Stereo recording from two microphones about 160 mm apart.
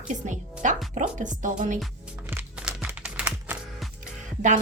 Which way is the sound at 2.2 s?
10° right (ahead or behind).